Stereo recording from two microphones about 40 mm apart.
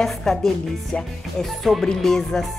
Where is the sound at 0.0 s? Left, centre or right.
Centre.